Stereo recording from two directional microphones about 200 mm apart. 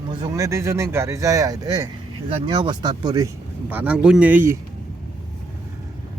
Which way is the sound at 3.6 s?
10° right (ahead or behind).